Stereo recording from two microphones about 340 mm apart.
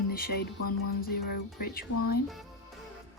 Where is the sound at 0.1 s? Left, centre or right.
Left.